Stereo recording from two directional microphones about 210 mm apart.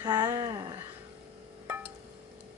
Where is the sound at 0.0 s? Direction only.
20° right (ahead or behind).